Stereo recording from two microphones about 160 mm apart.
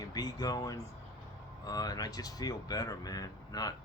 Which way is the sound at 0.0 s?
25° left (ahead or behind).